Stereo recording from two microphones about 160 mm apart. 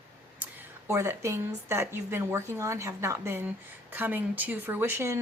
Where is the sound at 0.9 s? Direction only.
15° right (ahead or behind).